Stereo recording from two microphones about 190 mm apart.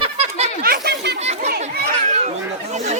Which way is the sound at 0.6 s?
55° right (ahead or behind).